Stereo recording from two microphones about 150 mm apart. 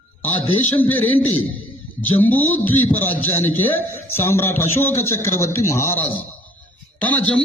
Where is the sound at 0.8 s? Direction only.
10° left (ahead or behind).